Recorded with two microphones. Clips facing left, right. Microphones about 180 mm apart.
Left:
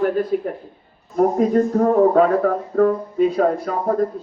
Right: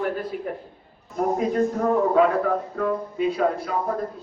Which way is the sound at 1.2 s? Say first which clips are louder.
Left 6 dB; 40° left (ahead or behind).